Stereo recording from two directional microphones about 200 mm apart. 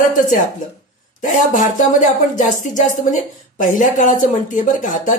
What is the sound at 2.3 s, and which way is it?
Speech, 40° left (ahead or behind).